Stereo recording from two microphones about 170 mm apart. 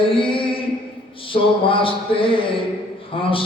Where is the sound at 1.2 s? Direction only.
30° left (ahead or behind).